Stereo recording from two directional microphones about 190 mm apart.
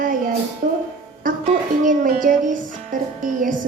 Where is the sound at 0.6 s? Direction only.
40° right (ahead or behind).